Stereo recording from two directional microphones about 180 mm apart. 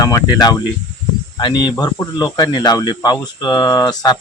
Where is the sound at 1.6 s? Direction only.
20° left (ahead or behind).